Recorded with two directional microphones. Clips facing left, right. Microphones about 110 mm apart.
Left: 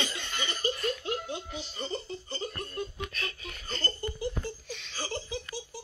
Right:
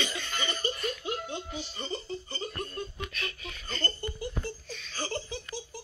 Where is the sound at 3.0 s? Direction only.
35° left (ahead or behind).